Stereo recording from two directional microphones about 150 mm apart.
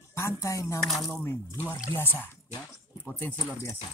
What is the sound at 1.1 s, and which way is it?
Speech, 15° left (ahead or behind).